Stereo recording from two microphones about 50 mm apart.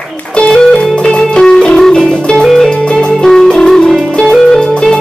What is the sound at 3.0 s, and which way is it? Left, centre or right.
Music, centre.